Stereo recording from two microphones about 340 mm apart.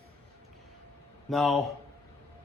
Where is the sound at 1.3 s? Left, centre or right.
Centre.